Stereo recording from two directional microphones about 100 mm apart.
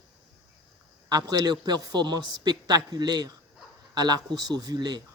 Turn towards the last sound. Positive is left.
turn(degrees=-45)  # may be behind; listen again after turning